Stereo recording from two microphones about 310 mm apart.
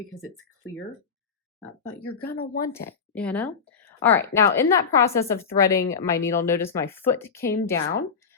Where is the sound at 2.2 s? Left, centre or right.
Left.